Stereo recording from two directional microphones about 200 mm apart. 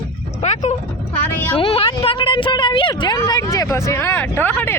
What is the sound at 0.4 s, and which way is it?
Vehicle, 35° left (ahead or behind).